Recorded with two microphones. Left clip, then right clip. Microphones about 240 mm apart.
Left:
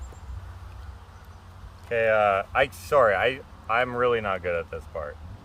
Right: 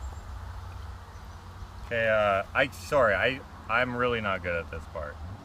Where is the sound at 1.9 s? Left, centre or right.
Centre.